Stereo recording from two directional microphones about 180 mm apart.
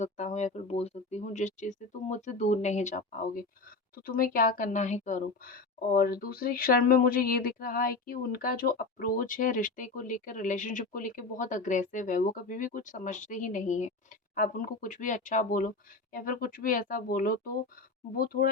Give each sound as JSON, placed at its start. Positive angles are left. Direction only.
{"t": 0.0, "sound": "a woman's voice", "side_deg": 40}